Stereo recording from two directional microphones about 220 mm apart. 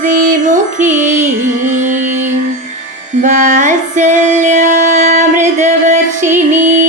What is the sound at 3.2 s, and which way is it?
Music, 35° right (ahead or behind).